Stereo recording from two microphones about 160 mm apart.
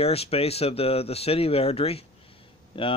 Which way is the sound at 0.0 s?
40° left (ahead or behind).